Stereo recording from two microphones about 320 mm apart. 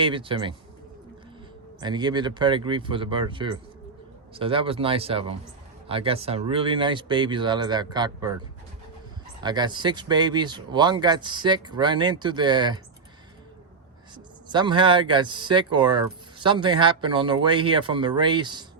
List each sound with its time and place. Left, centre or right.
0.0 s speech: centre
1.8 s speech: centre
9.4 s speech: centre
14.4 s speech: centre